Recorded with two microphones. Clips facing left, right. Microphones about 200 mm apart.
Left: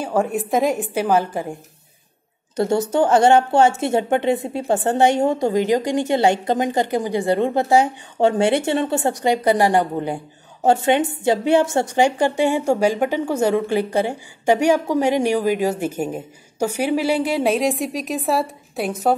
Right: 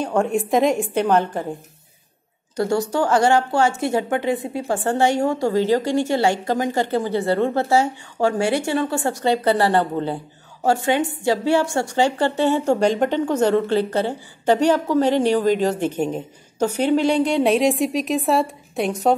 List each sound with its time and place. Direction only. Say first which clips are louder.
0.0 s a woman's voice: right 1 dB; 5° left (ahead or behind)
2.5 s a woman's voice: left 2 dB; 25° left (ahead or behind); by 19.1 s centre (ahead or behind)